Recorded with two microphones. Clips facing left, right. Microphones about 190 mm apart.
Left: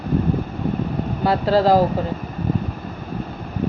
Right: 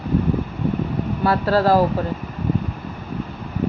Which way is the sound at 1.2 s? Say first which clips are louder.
Left 1 dB; 15° left (ahead or behind).